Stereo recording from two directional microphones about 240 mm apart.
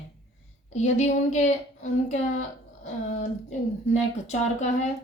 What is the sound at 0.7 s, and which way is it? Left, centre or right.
A woman's voice, left.